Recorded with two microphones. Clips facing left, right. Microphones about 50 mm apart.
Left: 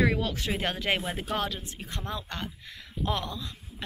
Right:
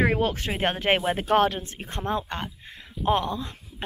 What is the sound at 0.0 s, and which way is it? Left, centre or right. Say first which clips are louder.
A woman's voice: right 3 dB; right.